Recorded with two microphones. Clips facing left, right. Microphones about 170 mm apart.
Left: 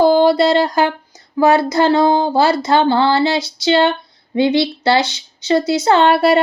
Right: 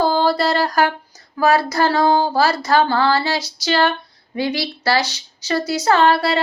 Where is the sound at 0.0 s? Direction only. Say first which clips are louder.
Left 6 dB; 20° left (ahead or behind).